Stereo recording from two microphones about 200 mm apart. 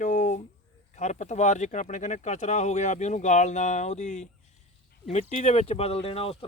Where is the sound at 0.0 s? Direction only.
40° left (ahead or behind).